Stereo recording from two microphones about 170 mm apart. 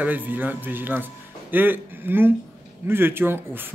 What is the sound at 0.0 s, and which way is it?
Speech, 10° right (ahead or behind).